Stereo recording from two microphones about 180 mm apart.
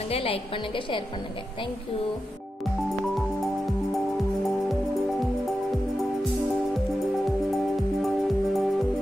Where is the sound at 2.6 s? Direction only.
Centre (ahead or behind).